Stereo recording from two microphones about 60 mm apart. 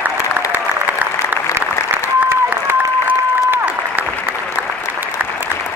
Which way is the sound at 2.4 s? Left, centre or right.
Right.